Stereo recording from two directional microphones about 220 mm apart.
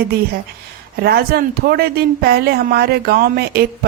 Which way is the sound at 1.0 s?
45° right (ahead or behind).